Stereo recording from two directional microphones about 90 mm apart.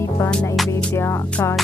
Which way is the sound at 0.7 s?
25° left (ahead or behind).